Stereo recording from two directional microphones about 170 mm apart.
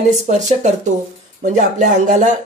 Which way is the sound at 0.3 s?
45° right (ahead or behind).